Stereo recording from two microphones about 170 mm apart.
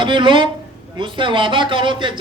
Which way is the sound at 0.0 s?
30° right (ahead or behind).